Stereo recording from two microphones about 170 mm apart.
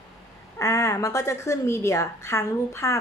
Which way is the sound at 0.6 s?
20° left (ahead or behind).